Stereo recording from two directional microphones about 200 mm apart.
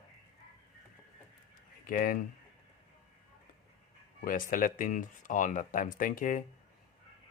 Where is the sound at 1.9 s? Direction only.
40° left (ahead or behind).